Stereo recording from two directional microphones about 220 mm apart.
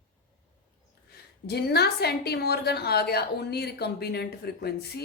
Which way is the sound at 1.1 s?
45° left (ahead or behind).